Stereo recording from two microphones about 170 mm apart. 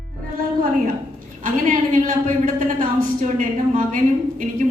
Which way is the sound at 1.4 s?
50° right (ahead or behind).